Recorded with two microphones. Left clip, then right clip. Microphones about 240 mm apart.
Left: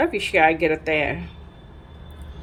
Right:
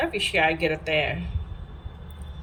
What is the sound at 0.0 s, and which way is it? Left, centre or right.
Speech, centre.